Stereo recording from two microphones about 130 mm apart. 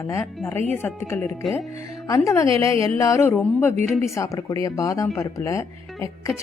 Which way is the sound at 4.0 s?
25° left (ahead or behind).